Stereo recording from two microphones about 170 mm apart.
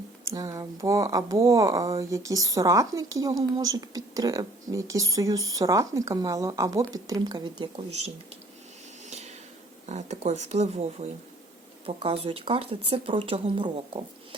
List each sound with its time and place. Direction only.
0.3 s speech: 20° right (ahead or behind)
9.0 s a sound: 40° right (ahead or behind)
9.8 s speech: 45° right (ahead or behind)